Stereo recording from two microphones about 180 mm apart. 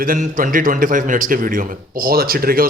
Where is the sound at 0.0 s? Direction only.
50° right (ahead or behind).